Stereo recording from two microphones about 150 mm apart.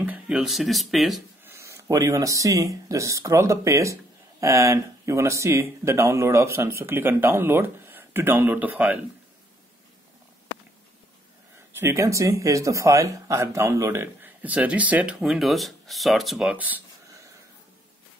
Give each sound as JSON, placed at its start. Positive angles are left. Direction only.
{"t": 0.0, "sound": "speech", "side_deg": -5}
{"t": 1.4, "sound": "speech", "side_deg": -20}
{"t": 11.7, "sound": "speech", "side_deg": -15}